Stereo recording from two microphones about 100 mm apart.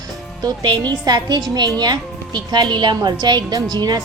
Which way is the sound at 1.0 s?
45° right (ahead or behind).